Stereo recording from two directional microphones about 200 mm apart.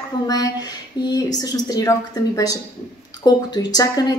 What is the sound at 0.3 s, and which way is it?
A woman's voice, 20° left (ahead or behind).